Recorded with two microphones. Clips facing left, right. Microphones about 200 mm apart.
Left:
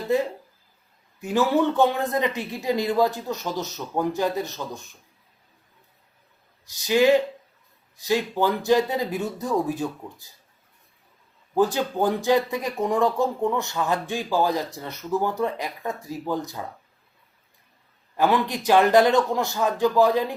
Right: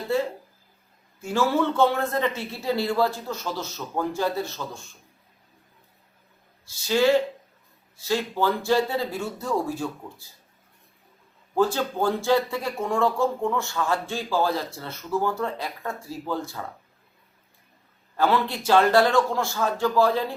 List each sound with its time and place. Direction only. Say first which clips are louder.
0.1 s speech: left 2 dB; 15° left (ahead or behind)
6.7 s speech: left 2 dB; 15° left (ahead or behind)
11.5 s speech: left 1 dB; 15° left (ahead or behind)
18.2 s speech: left 1 dB; 15° left (ahead or behind)